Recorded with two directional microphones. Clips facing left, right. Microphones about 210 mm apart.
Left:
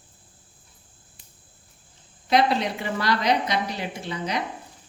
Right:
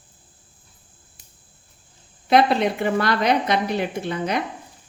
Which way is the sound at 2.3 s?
55° right (ahead or behind).